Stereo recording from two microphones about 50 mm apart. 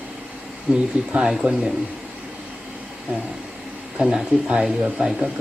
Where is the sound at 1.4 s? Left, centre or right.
Centre.